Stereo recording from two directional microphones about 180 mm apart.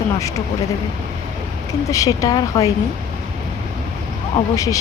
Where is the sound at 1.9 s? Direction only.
20° left (ahead or behind).